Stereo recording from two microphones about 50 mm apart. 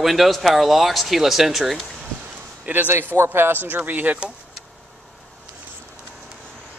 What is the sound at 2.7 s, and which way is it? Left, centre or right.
Speech, right.